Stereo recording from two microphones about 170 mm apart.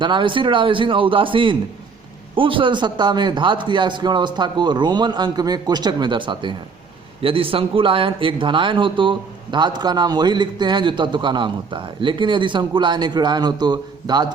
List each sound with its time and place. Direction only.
0.0 s speech: 30° right (ahead or behind)